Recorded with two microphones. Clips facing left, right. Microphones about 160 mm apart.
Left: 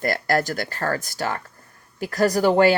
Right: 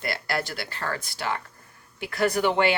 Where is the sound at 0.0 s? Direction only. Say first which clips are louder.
Left 7 dB; 45° left (ahead or behind).